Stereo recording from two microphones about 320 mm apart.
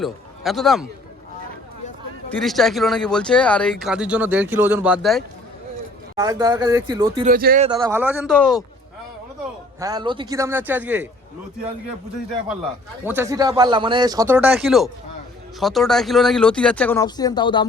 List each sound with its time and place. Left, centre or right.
0.0 s a man's voice: centre
2.3 s speech: centre
7.3 s speech: right
7.7 s speech: centre
9.8 s speech: centre
13.1 s speech: centre